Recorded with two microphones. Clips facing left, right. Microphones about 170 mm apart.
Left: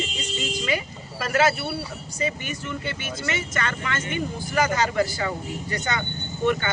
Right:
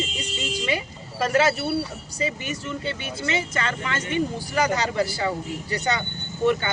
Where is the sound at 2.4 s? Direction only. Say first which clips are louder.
Right 2 dB; 35° right (ahead or behind).